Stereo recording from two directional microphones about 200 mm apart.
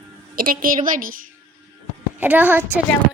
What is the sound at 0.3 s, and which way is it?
Speech, 45° right (ahead or behind).